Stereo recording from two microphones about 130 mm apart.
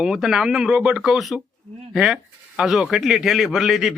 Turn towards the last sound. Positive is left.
turn(degrees=0)  # may be behind; listen again after turning